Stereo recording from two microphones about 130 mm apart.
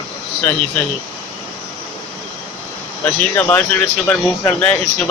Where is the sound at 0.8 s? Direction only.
10° left (ahead or behind).